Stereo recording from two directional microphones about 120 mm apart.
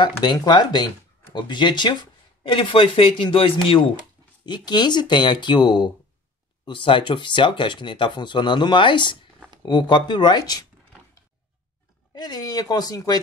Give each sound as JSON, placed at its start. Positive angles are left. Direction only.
{"t": 0.2, "sound": "speech", "side_deg": 40}
{"t": 4.5, "sound": "speech", "side_deg": 40}
{"t": 12.1, "sound": "speech", "side_deg": 35}